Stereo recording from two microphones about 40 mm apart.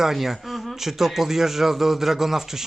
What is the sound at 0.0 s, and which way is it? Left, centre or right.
Speech, centre.